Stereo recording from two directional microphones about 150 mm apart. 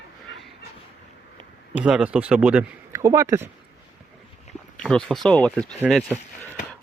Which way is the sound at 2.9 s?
20° right (ahead or behind).